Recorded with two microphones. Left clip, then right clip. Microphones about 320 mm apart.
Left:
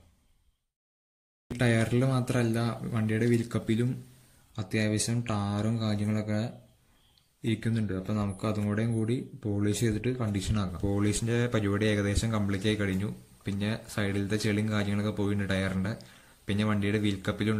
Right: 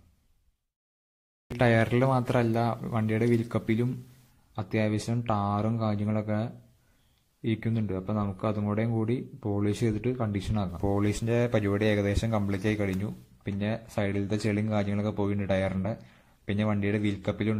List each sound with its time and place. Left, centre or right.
1.6 s speech: centre